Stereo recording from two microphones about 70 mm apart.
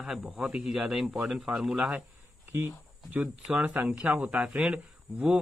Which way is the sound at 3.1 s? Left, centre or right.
Right.